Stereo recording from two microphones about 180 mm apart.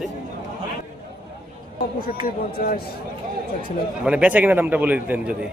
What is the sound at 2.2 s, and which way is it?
Speech, 55° left (ahead or behind).